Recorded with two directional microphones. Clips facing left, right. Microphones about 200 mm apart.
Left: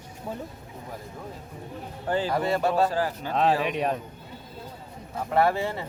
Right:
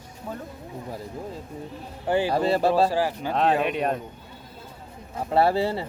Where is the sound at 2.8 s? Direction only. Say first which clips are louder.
Right 3 dB; 10° right (ahead or behind).